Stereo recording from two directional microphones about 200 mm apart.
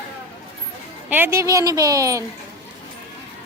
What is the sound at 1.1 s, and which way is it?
Speech, 10° right (ahead or behind).